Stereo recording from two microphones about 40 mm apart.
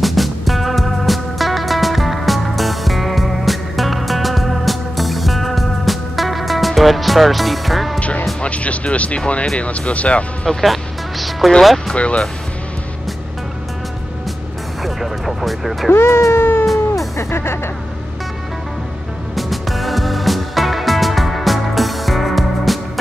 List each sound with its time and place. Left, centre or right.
0.0 s music: centre
8.4 s speech: left
10.6 s music: centre
11.9 s speech: left
14.8 s speech: centre
15.9 s speech: left
16.6 s music: centre
17.3 s music: left
19.3 s music: centre